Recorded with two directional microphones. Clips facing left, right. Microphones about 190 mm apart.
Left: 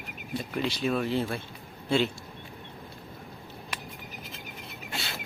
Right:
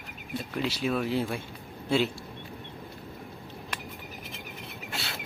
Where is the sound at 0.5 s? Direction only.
5° right (ahead or behind).